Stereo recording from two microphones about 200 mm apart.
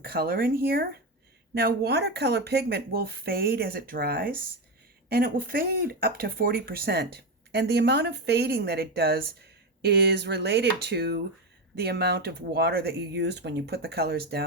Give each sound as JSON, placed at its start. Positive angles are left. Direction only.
{"t": 0.0, "sound": "speech", "side_deg": -50}